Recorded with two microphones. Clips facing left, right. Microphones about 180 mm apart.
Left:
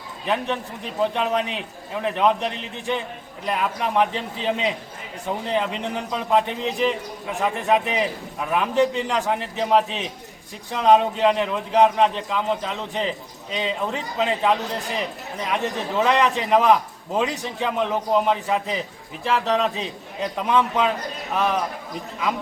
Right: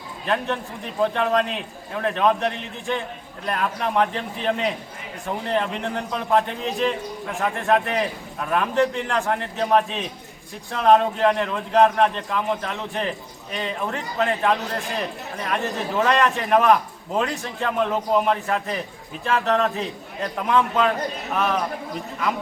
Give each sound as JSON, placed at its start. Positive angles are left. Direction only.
{"t": 0.3, "sound": "speech", "side_deg": 10}